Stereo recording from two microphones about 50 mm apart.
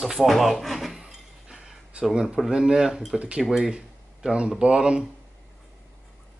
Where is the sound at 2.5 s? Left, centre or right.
Centre.